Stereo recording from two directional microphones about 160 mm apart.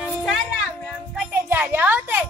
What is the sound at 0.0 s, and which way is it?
Music, centre (ahead or behind).